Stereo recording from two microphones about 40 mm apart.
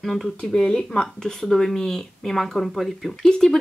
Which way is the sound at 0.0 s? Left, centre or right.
Centre.